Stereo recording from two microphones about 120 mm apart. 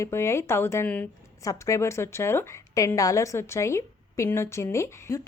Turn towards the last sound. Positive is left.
turn(degrees=20)  # may be behind; listen again after turning